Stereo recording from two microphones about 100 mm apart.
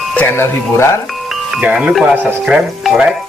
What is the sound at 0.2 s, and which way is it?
Speech, 25° left (ahead or behind).